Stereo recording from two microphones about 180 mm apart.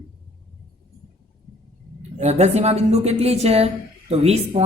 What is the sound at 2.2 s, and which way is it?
Speech, 40° right (ahead or behind).